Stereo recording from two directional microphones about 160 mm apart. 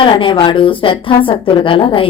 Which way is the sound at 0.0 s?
30° left (ahead or behind).